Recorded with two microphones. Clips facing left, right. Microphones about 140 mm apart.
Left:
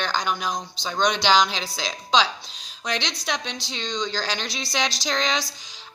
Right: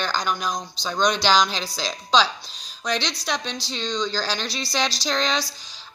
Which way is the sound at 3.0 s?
20° left (ahead or behind).